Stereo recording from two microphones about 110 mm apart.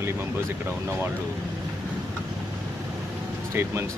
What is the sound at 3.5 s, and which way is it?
Speech, 20° right (ahead or behind).